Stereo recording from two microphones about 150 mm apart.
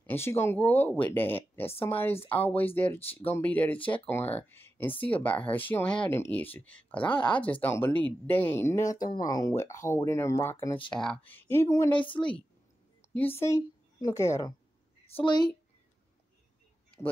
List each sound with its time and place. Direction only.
0.0 s speech: 15° left (ahead or behind)
7.0 s speech: 30° left (ahead or behind)
7.6 s speech: 15° left (ahead or behind)
10.9 s a woman's voice: 5° left (ahead or behind)
15.0 s a woman's voice: 35° left (ahead or behind)